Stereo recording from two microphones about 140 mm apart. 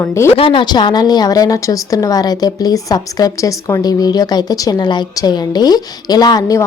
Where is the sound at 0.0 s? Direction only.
20° left (ahead or behind).